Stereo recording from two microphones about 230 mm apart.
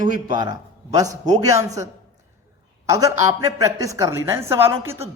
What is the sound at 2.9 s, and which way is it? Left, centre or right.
A man's voice, centre.